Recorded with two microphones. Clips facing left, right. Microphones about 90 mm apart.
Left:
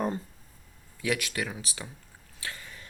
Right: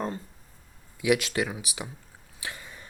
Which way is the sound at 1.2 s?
25° right (ahead or behind).